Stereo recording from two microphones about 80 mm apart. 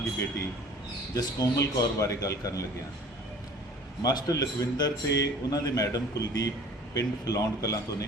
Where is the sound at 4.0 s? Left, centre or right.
Left.